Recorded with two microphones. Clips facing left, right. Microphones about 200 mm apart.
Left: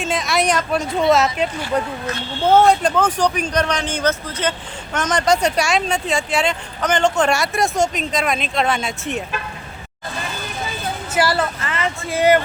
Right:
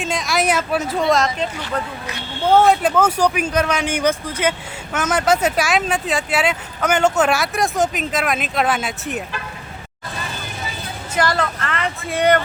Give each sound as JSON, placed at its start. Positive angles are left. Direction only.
{"t": 0.0, "sound": "speech", "side_deg": 0}
{"t": 2.5, "sound": "speech", "side_deg": 0}
{"t": 11.1, "sound": "speech", "side_deg": 5}